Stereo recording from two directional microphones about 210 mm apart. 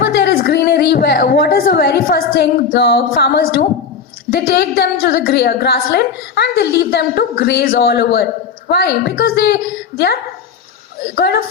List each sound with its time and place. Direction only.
0.0 s a woman's voice: 50° left (ahead or behind)
11.0 s a woman's voice: 50° left (ahead or behind)